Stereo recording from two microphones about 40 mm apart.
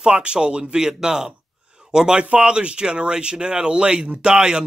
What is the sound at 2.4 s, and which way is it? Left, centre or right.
Speech, right.